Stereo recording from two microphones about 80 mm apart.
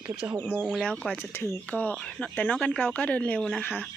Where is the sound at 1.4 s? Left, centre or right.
Centre.